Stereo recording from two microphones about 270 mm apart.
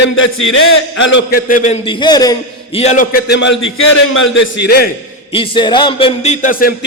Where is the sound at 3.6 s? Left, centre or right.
Left.